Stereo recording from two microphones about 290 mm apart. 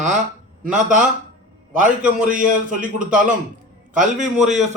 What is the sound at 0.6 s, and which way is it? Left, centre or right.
A man's voice, right.